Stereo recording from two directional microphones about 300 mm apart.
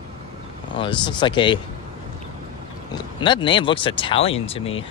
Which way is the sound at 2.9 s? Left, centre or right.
Centre.